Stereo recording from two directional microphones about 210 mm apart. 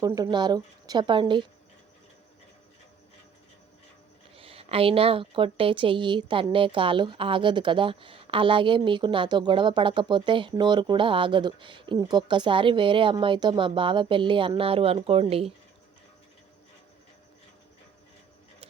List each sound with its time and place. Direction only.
0.0 s speech: 20° right (ahead or behind)
4.4 s speech: 25° right (ahead or behind)